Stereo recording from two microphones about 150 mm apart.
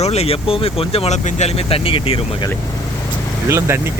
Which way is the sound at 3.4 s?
15° right (ahead or behind).